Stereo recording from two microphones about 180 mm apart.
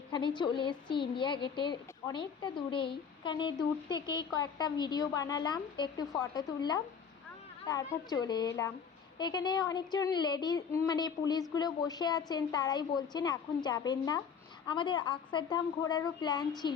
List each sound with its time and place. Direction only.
0.1 s a woman's voice: 25° left (ahead or behind)